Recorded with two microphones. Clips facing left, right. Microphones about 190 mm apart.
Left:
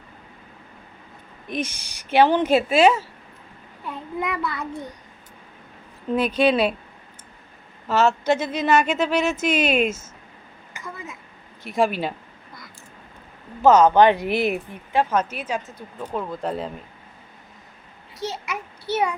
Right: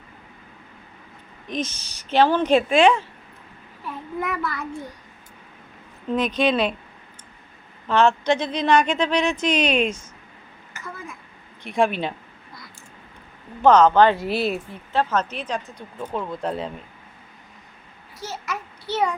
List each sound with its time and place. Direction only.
1.5 s speech: 10° left (ahead or behind)
3.8 s child singing: 20° left (ahead or behind)
6.1 s speech: 10° left (ahead or behind)
7.9 s speech: 5° left (ahead or behind)
10.8 s a sound: 20° left (ahead or behind)
11.6 s speech: 5° left (ahead or behind)
13.6 s speech: 5° left (ahead or behind)
18.4 s a sound: 10° left (ahead or behind)